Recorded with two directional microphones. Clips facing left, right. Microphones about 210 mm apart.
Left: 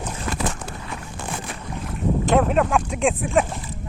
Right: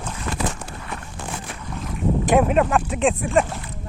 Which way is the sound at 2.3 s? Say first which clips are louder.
Right 1 dB; 10° right (ahead or behind).